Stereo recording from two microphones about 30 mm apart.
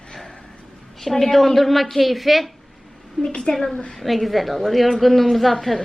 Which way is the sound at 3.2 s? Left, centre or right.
Left.